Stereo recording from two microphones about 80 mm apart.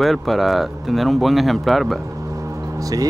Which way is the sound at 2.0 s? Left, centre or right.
Right.